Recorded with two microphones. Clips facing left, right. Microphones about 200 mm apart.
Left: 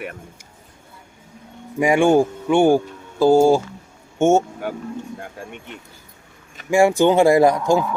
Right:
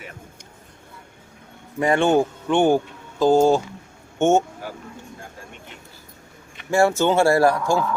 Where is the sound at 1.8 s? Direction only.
10° left (ahead or behind).